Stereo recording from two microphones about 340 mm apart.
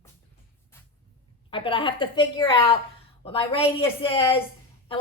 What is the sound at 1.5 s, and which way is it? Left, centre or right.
A woman's voice, centre.